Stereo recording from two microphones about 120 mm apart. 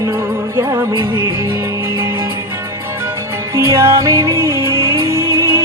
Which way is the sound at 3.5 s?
25° right (ahead or behind).